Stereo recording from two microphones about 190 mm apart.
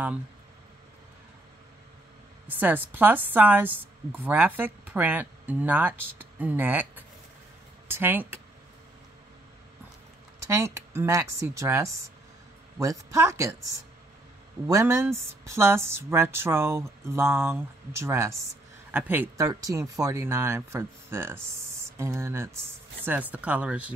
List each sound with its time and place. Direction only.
2.4 s a woman's voice: 10° right (ahead or behind)
10.4 s a woman's voice: 15° right (ahead or behind)
14.7 s a woman's voice: 15° right (ahead or behind)